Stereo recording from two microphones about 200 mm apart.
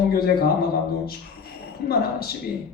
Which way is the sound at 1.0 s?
50° left (ahead or behind).